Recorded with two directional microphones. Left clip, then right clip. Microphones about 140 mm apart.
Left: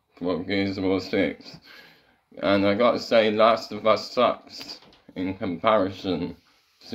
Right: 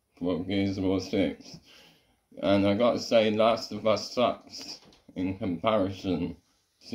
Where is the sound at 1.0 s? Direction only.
50° left (ahead or behind).